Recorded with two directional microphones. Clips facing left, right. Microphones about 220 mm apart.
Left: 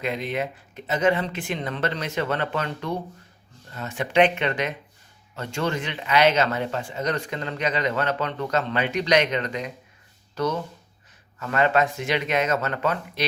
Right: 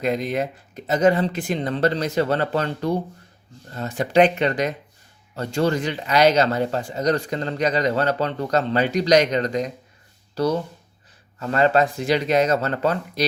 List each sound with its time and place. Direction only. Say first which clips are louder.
0.0 s speech: right 4 dB; 40° right (ahead or behind)